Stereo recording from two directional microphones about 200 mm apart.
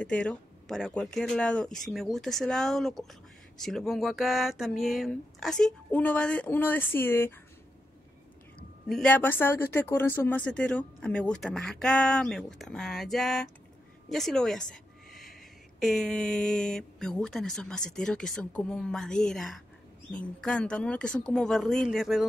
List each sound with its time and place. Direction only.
0.0 s speech: 5° left (ahead or behind)
8.8 s speech: 5° left (ahead or behind)
14.1 s a sound: centre (ahead or behind)
15.8 s speech: centre (ahead or behind)